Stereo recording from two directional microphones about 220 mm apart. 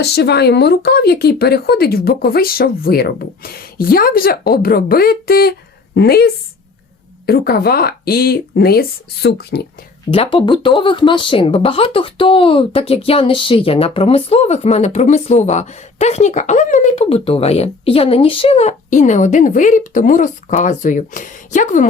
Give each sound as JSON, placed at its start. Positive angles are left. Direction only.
{"t": 0.0, "sound": "speech", "side_deg": 50}
{"t": 10.1, "sound": "speech", "side_deg": 25}